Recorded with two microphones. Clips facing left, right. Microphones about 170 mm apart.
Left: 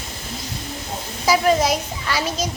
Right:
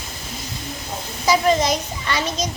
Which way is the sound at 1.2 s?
10° left (ahead or behind).